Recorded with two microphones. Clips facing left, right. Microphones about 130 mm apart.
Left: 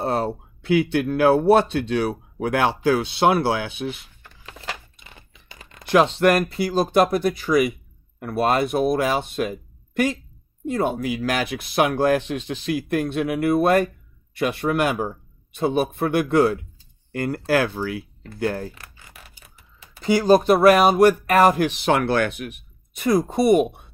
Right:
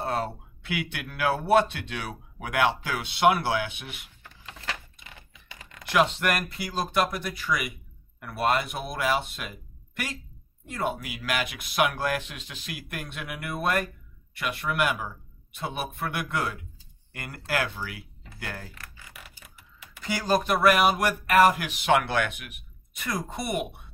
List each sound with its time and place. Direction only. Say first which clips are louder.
0.0 s speech: left 6 dB; 30° left (ahead or behind)
5.1 s a sound: left 2 dB; 30° left (ahead or behind)
6.7 s speech: left 8 dB; 35° left (ahead or behind)
20.0 s speech: left 10 dB; 25° left (ahead or behind)